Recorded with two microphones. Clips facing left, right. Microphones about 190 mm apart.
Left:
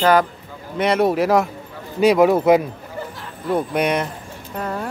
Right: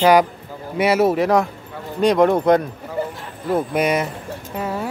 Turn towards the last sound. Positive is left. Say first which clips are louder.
# right 1 dB
turn(degrees=-5)  # may be behind; listen again after turning